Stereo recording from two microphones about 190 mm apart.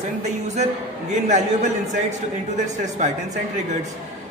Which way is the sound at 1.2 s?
40° right (ahead or behind).